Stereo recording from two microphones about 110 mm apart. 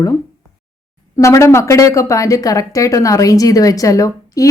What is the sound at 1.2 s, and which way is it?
A woman's voice, 25° left (ahead or behind).